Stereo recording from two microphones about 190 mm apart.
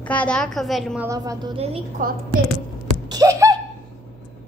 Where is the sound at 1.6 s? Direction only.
30° right (ahead or behind).